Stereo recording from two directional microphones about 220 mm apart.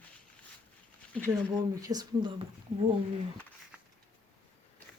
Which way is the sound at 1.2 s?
15° right (ahead or behind).